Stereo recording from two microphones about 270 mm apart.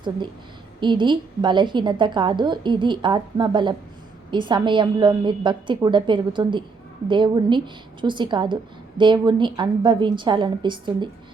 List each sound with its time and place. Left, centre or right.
0.8 s a woman's voice: centre